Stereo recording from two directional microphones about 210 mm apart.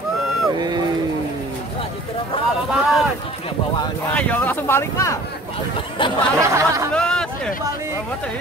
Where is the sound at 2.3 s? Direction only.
25° left (ahead or behind).